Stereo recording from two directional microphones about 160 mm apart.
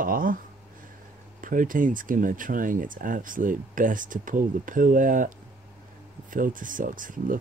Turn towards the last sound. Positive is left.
turn(degrees=-55)  # may be behind; listen again after turning